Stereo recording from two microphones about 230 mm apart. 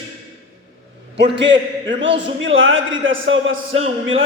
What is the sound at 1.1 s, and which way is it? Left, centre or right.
A man's voice, right.